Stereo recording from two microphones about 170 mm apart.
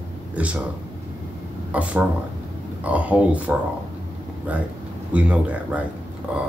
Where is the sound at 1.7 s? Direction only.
10° right (ahead or behind).